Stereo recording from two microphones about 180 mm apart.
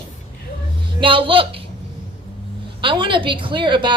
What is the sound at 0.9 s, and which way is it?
Speech, 30° right (ahead or behind).